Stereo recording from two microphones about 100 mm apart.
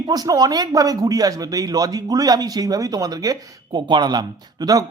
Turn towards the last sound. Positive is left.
turn(degrees=-40)  # may be behind; listen again after turning